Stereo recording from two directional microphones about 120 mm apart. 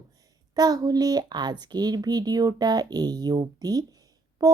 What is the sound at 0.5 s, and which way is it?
A child's voice, 35° right (ahead or behind).